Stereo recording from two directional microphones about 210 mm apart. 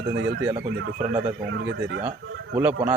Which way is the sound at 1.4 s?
60° right (ahead or behind).